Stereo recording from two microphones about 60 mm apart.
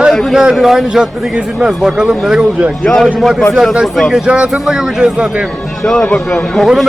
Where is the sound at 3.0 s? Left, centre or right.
Centre.